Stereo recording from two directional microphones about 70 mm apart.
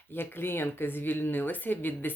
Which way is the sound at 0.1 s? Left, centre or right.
Left.